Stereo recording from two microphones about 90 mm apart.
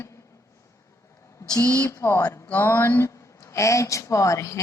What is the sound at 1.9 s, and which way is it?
Speech, 30° left (ahead or behind).